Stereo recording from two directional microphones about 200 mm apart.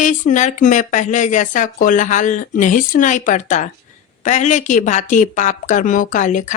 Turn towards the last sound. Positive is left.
turn(degrees=40)  # may be behind; listen again after turning